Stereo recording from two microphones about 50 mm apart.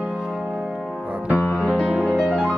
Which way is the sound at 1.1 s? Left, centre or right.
Right.